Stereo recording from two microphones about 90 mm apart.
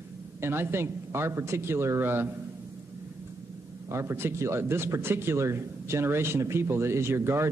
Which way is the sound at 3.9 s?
30° right (ahead or behind).